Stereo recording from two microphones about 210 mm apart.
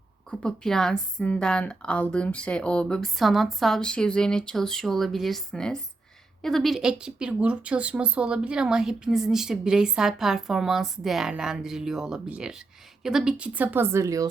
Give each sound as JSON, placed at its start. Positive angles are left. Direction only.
{"t": 0.3, "sound": "a woman's voice", "side_deg": 0}